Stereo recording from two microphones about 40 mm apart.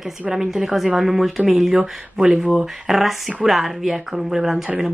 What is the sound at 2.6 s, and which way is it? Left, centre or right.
Speech, centre.